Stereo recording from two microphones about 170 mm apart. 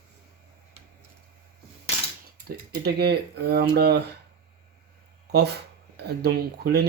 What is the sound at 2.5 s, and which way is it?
Speech, 70° right (ahead or behind).